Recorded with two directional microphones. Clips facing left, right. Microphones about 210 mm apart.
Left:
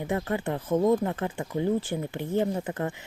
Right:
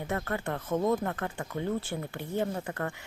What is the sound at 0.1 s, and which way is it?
Speech, 15° left (ahead or behind).